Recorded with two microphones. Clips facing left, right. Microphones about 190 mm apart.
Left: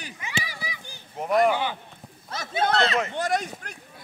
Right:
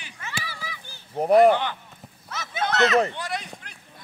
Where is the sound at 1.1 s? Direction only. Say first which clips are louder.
Right 6 dB; 35° right (ahead or behind).